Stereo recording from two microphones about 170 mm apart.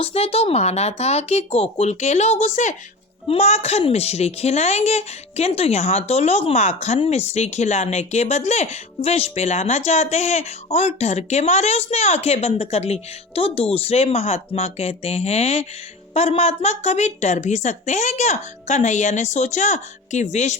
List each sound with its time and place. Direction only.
0.0 s a woman's voice: 35° left (ahead or behind)